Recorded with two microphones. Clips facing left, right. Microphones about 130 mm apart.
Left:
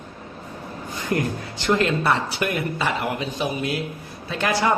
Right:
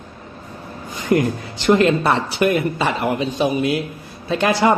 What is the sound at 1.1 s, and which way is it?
Speech, 20° right (ahead or behind).